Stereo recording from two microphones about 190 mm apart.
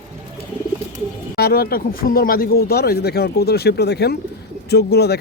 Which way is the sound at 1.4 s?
55° left (ahead or behind).